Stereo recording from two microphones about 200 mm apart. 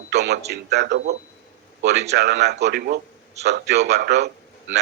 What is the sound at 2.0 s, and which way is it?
A man's voice, 55° right (ahead or behind).